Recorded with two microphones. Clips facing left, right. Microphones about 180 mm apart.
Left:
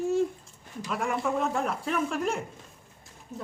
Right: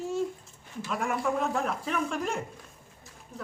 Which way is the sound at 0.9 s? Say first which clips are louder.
Left 1 dB; centre (ahead or behind).